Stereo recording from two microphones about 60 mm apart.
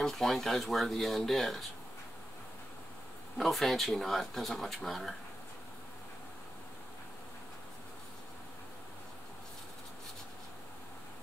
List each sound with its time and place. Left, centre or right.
0.0 s speech: centre
3.3 s speech: centre